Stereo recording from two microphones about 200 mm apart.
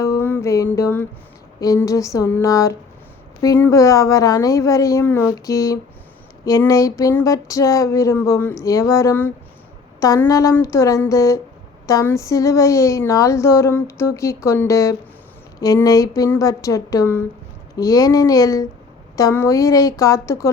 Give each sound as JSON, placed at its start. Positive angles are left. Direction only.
{"t": 0.0, "sound": "music", "side_deg": 10}
{"t": 1.6, "sound": "speech", "side_deg": 15}